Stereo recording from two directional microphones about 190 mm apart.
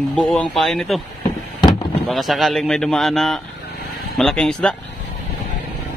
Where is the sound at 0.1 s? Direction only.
5° left (ahead or behind).